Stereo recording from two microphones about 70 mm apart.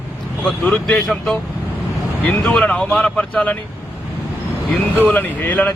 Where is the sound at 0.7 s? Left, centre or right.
Centre.